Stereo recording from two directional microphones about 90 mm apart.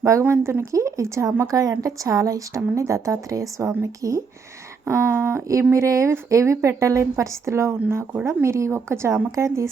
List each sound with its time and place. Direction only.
0.0 s a woman's voice: 30° right (ahead or behind)
4.9 s a woman's voice: 30° right (ahead or behind)